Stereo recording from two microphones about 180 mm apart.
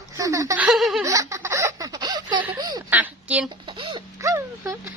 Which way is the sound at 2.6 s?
25° right (ahead or behind).